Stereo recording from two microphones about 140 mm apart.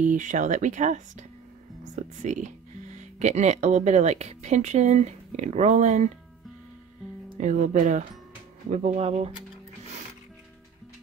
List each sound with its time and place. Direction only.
0.0 s speech: 65° right (ahead or behind)
2.2 s speech: 60° right (ahead or behind)
7.3 s speech: 65° right (ahead or behind)
8.6 s speech: 55° right (ahead or behind)